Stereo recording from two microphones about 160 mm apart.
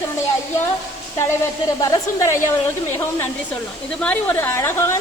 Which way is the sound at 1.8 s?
25° left (ahead or behind).